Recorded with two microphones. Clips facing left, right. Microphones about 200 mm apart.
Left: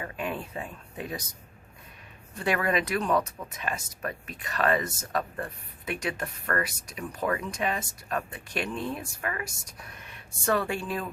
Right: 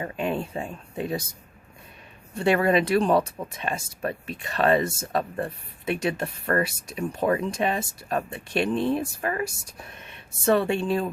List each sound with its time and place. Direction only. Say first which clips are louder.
0.0 s speech: right 6 dB; 25° right (ahead or behind)
2.3 s speech: right 6 dB; 30° right (ahead or behind)